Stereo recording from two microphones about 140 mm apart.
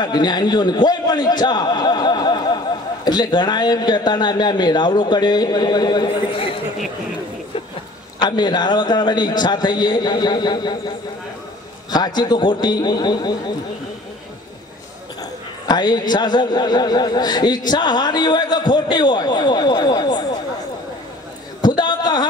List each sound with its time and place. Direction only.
0.0 s a man's voice: 30° left (ahead or behind)
8.2 s a man's voice: 30° left (ahead or behind)
11.9 s a man's voice: 30° left (ahead or behind)
15.6 s a man's voice: 30° left (ahead or behind)
21.6 s a sound: 30° left (ahead or behind)